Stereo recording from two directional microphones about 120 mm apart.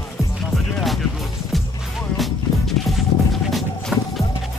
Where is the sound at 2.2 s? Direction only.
Centre (ahead or behind).